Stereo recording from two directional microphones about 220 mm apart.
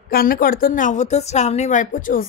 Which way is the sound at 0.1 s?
40° left (ahead or behind).